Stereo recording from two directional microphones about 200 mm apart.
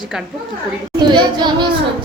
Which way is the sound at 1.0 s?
20° right (ahead or behind).